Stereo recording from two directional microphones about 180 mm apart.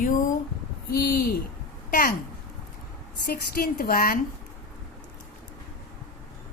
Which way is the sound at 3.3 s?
55° left (ahead or behind).